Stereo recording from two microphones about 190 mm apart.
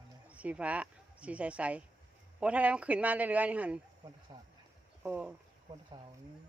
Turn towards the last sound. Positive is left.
turn(degrees=-10)  # may be behind; listen again after turning